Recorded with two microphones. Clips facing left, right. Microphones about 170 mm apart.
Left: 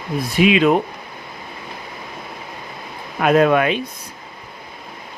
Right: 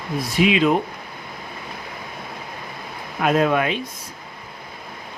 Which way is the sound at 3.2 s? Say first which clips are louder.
Left 4 dB; 65° left (ahead or behind).